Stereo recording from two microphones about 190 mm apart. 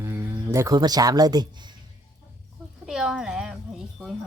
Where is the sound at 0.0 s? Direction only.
15° right (ahead or behind).